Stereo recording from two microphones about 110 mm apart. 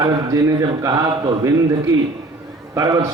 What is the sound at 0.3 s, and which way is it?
A man's voice, 30° right (ahead or behind).